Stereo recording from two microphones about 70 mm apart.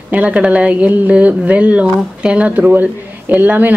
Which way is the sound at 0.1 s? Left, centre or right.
Centre.